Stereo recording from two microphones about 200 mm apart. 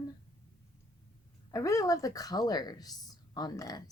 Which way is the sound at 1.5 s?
15° left (ahead or behind).